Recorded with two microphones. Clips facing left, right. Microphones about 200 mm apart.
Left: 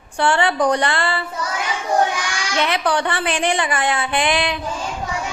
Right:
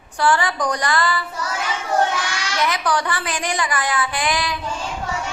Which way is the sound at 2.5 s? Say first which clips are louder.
Left 2 dB; 25° left (ahead or behind).